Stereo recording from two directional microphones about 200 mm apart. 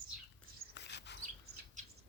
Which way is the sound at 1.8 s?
35° right (ahead or behind).